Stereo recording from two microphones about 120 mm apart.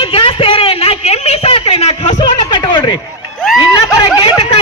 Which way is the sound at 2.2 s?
40° left (ahead or behind).